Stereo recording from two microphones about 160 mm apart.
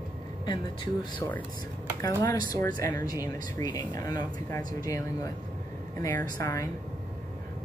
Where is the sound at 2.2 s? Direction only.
25° left (ahead or behind).